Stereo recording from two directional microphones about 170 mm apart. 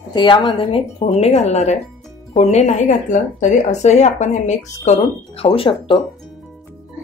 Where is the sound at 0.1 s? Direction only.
25° left (ahead or behind).